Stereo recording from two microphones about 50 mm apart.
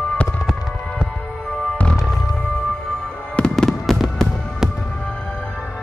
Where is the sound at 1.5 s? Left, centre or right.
Left.